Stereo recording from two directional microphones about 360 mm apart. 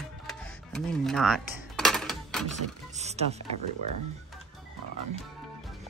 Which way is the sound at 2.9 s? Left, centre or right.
Centre.